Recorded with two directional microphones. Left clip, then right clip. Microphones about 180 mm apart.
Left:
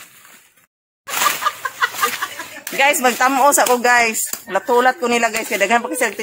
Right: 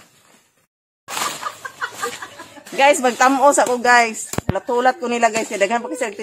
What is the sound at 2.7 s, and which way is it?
Speech, 15° left (ahead or behind).